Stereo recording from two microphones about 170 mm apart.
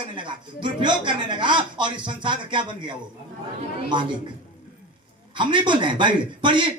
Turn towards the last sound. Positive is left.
turn(degrees=-30)  # may be behind; listen again after turning